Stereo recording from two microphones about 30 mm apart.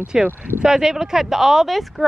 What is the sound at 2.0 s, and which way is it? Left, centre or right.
Speech, centre.